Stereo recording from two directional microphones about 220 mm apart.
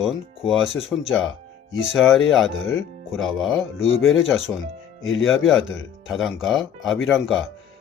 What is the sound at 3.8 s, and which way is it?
Speech, 65° left (ahead or behind).